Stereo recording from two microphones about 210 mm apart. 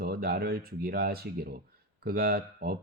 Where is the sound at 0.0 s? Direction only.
50° right (ahead or behind).